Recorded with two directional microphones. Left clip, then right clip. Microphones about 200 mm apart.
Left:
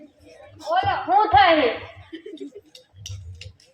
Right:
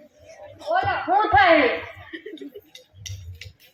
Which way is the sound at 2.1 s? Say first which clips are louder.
Even; 60° left (ahead or behind).